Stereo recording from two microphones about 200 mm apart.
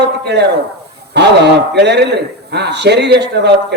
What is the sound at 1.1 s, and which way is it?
A man's voice, 55° right (ahead or behind).